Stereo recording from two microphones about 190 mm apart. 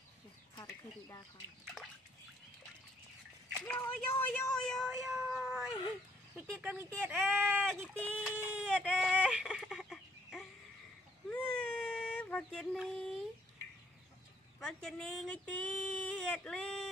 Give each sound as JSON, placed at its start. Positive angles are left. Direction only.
{"t": 0.6, "sound": "a sound", "side_deg": 20}
{"t": 3.5, "sound": "speech", "side_deg": 5}
{"t": 7.9, "sound": "speech", "side_deg": 5}
{"t": 8.5, "sound": "a sound", "side_deg": -5}
{"t": 8.7, "sound": "speech", "side_deg": 5}
{"t": 9.2, "sound": "a sound", "side_deg": -5}
{"t": 11.2, "sound": "baby cry", "side_deg": 5}
{"t": 12.7, "sound": "speech", "side_deg": 0}
{"t": 14.6, "sound": "speech", "side_deg": 5}